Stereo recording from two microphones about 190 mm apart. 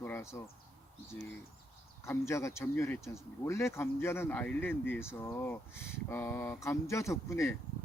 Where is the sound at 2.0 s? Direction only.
15° left (ahead or behind).